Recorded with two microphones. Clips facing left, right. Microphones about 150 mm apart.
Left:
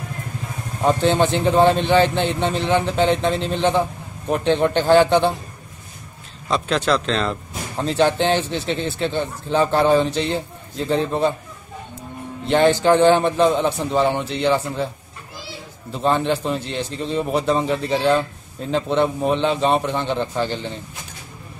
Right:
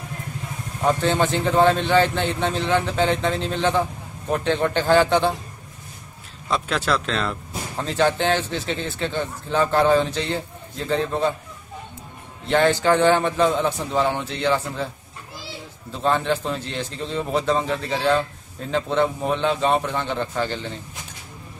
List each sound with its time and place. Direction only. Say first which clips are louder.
0.8 s a man's voice: left 3 dB; 20° left (ahead or behind)
6.5 s speech: left 3 dB; 5° right (ahead or behind)
8.0 s a man's voice: left 2 dB; 20° left (ahead or behind)
12.4 s a man's voice: left 3 dB; 20° left (ahead or behind)
15.9 s a man's voice: left 2 dB; 15° left (ahead or behind)